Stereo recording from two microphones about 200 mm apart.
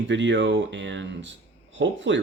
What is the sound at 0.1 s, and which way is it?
Speech, 65° right (ahead or behind).